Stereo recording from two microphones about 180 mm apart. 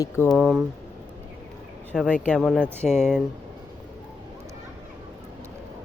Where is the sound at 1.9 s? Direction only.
5° left (ahead or behind).